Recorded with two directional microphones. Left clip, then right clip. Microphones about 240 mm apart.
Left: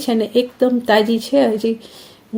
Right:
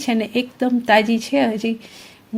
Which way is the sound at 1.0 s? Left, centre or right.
Right.